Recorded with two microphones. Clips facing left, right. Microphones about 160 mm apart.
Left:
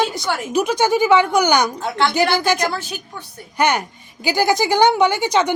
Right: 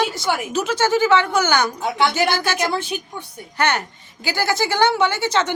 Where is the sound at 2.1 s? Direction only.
15° left (ahead or behind).